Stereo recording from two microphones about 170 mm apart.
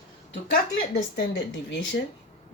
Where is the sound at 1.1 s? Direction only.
80° left.